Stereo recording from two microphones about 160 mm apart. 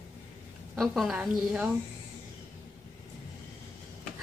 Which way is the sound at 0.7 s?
Centre (ahead or behind).